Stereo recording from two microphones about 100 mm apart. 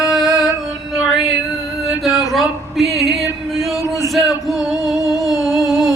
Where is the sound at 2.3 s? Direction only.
Centre (ahead or behind).